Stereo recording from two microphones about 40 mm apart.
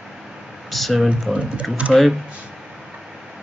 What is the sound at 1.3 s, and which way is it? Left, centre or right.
Speech, right.